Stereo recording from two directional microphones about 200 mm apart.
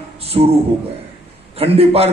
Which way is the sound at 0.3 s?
30° right (ahead or behind).